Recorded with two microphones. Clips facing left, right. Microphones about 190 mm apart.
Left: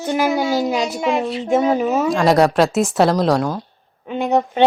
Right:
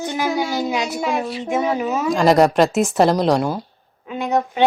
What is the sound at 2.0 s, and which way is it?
Speech, centre (ahead or behind).